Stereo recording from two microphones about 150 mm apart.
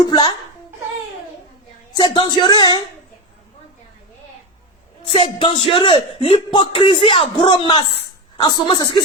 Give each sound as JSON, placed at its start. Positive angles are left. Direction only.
{"t": 0.0, "sound": "speech", "side_deg": 30}
{"t": 1.9, "sound": "a sound", "side_deg": 30}
{"t": 2.4, "sound": "a woman's voice", "side_deg": 30}
{"t": 5.1, "sound": "speech", "side_deg": 35}